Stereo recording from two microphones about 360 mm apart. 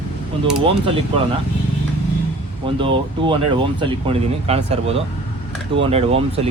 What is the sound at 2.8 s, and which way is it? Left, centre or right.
Speech, centre.